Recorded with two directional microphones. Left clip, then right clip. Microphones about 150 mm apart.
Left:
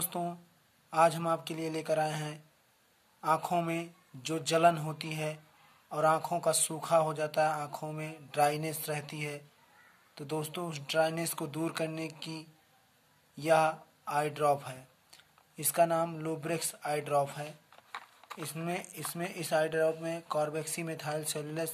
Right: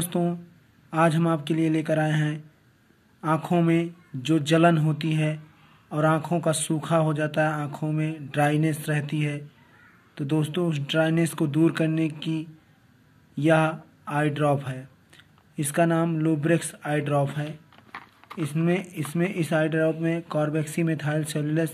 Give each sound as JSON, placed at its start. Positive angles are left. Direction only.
{"t": 0.1, "sound": "speech", "side_deg": 10}
{"t": 17.9, "sound": "a sound", "side_deg": 25}
{"t": 19.1, "sound": "speech", "side_deg": 15}
{"t": 20.5, "sound": "speech", "side_deg": 20}